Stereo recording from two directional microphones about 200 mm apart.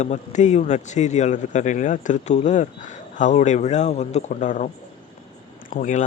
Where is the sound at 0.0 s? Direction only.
35° left (ahead or behind).